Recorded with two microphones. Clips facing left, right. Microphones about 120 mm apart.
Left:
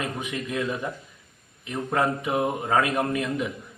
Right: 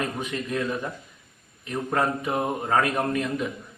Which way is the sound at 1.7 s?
10° left (ahead or behind).